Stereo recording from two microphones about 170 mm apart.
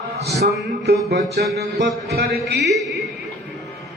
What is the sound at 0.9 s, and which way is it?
A man's voice, 70° right (ahead or behind).